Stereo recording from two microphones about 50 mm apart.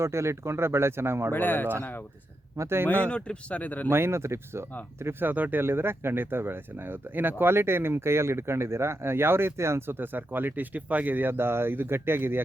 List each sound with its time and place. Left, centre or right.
0.0 s speech: right
1.3 s speech: left
2.6 s speech: right
3.1 s speech: left
3.6 s speech: left
3.8 s speech: right
5.2 s speech: right